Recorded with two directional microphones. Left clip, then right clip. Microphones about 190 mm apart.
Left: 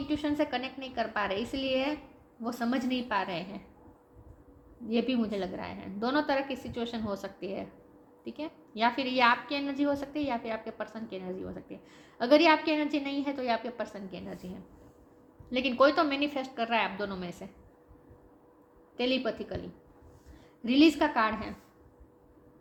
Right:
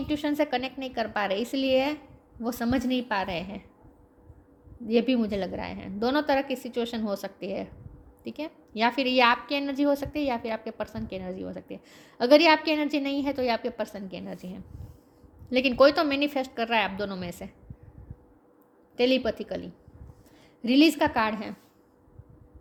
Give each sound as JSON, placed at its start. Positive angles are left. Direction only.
{"t": 0.1, "sound": "a woman's voice", "side_deg": -60}
{"t": 4.9, "sound": "a woman's voice", "side_deg": -60}
{"t": 18.9, "sound": "a woman's voice", "side_deg": -60}